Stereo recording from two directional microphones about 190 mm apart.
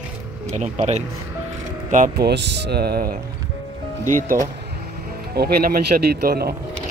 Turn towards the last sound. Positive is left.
turn(degrees=-55)  # may be behind; listen again after turning